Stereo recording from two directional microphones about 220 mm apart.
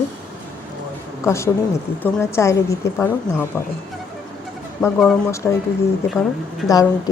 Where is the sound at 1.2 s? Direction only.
15° left (ahead or behind).